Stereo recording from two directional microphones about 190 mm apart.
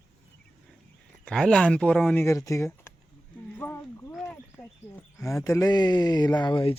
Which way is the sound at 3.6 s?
15° left (ahead or behind).